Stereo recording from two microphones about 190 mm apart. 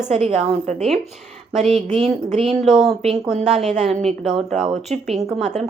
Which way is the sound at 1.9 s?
35° right (ahead or behind).